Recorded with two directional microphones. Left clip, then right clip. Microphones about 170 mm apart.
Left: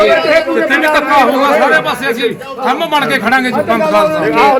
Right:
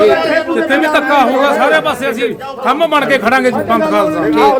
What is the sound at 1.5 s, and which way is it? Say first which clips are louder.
A man's voice: left 1 dB; 50° right (ahead or behind).